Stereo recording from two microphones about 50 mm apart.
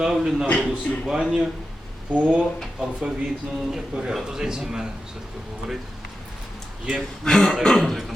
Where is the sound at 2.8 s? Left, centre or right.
Centre.